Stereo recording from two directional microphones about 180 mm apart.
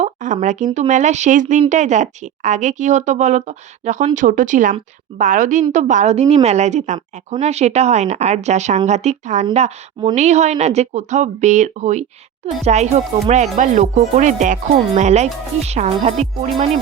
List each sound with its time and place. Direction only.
0.0 s speech: 45° right (ahead or behind)